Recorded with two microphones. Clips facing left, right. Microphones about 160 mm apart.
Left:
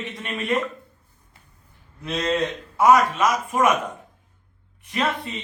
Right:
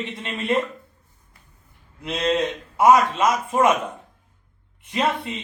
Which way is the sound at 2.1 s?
15° right (ahead or behind).